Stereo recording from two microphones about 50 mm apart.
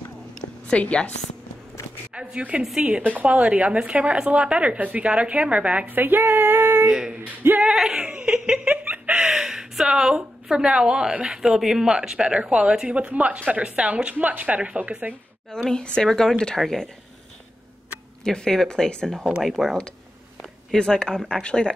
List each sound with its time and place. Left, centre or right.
0.7 s a woman's voice: left
2.4 s speech: right
5.9 s a sound: right
6.9 s speech: centre
8.6 s a sound: right
9.2 s speech: centre
14.1 s speech: right
15.7 s speech: centre
18.2 s speech: centre
19.0 s speech: centre
20.7 s speech: centre